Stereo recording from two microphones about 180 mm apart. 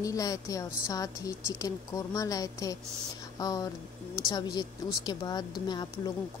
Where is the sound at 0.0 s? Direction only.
20° left (ahead or behind).